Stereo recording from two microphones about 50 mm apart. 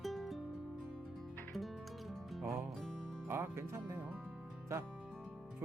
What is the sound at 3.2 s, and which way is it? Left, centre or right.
Speech, right.